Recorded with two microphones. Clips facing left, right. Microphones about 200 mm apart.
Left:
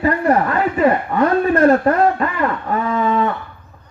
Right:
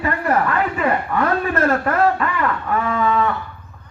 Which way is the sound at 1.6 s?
30° left (ahead or behind).